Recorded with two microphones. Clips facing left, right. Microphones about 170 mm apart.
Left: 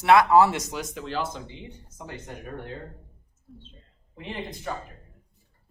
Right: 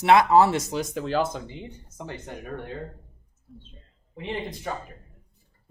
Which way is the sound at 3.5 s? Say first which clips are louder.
Even; centre (ahead or behind).